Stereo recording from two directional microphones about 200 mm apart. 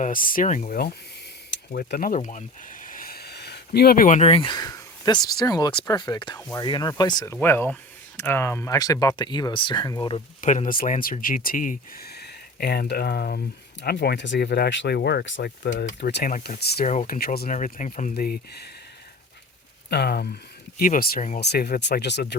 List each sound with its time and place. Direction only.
0.0 s speech: 45° left (ahead or behind)
1.7 s speech: 50° left (ahead or behind); by 10.2 s 25° left (ahead or behind)
10.4 s speech: 40° left (ahead or behind)
16.6 s speech: 55° left (ahead or behind)
16.8 s speech: 35° left (ahead or behind)
17.2 s speech: 50° left (ahead or behind)
18.1 s speech: 50° left (ahead or behind)
19.9 s speech: 55° left (ahead or behind)
21.4 s speech: 55° left (ahead or behind)